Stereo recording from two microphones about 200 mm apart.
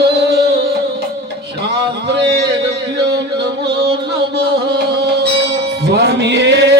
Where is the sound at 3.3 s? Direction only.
55° right (ahead or behind).